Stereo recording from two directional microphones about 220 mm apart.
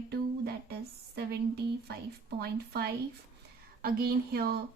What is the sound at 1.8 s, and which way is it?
Speech, 45° right (ahead or behind).